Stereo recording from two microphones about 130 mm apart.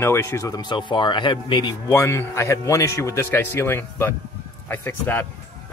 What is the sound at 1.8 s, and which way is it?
Speech, 20° left (ahead or behind).